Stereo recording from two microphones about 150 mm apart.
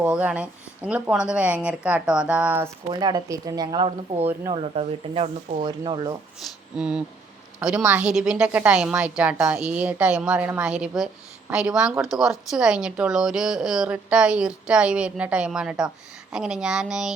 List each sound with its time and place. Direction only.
0.0 s a woman's voice: 10° right (ahead or behind)
2.9 s speech: 25° right (ahead or behind)
5.6 s speech: 25° right (ahead or behind)
6.7 s a woman's voice: 5° right (ahead or behind)